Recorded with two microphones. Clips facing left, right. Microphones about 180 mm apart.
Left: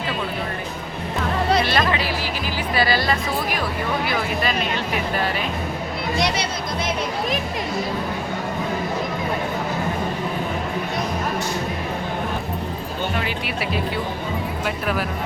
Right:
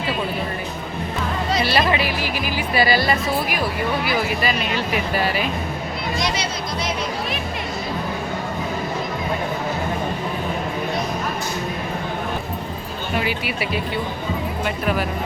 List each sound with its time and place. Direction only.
1.6 s music: 10° right (ahead or behind)
4.0 s speech: 5° right (ahead or behind)
6.1 s speech: 60° left (ahead or behind)
13.1 s speech: 5° right (ahead or behind)